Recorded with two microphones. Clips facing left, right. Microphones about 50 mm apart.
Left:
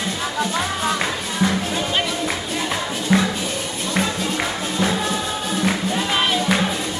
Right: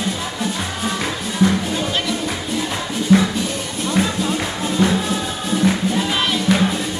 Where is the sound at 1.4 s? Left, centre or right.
Centre.